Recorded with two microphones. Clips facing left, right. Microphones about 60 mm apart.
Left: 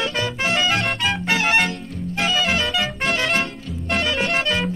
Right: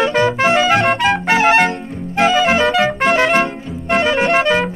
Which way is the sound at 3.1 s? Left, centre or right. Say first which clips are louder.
Right 8 dB; right.